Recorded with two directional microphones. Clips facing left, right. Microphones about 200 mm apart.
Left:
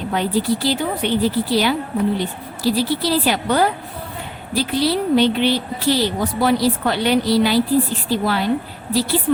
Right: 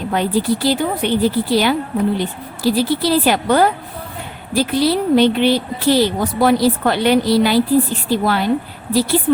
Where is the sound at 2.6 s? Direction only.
50° right (ahead or behind).